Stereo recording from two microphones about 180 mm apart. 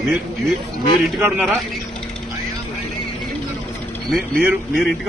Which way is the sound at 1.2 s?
10° right (ahead or behind).